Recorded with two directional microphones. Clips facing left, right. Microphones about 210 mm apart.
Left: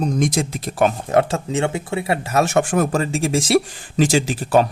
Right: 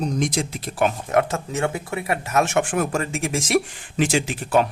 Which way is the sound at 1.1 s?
30° left (ahead or behind).